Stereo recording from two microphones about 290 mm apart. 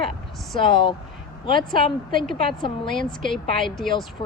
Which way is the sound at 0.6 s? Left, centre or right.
Centre.